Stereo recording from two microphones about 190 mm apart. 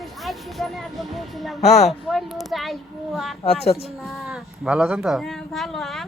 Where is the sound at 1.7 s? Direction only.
Centre (ahead or behind).